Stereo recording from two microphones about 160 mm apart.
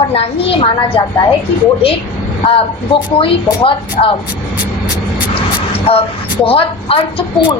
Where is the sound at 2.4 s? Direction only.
35° left (ahead or behind).